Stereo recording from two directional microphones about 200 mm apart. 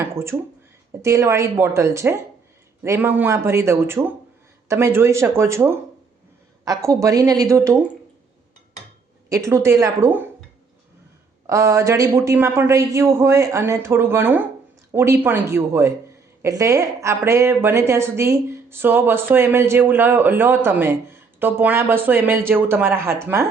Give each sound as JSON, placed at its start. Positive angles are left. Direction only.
{"t": 0.0, "sound": "speech", "side_deg": -10}
{"t": 9.3, "sound": "speech", "side_deg": -15}
{"t": 11.4, "sound": "speech", "side_deg": -15}